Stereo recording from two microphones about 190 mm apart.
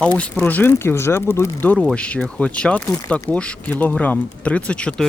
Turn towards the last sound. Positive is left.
turn(degrees=5)  # may be behind; listen again after turning